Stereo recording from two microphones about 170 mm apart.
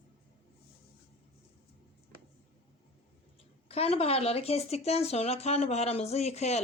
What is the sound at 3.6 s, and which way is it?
Speech, 35° left (ahead or behind).